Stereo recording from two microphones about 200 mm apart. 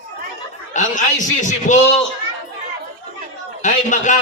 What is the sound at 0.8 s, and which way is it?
A man's voice, 40° left (ahead or behind).